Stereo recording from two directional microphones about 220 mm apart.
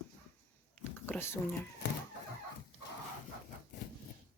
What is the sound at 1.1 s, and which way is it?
Speech, 10° left (ahead or behind).